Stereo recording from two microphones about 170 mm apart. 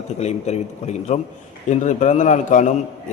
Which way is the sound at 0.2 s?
40° left (ahead or behind).